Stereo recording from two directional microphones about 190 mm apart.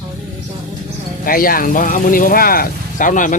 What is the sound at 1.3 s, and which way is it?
Speech, 50° left (ahead or behind).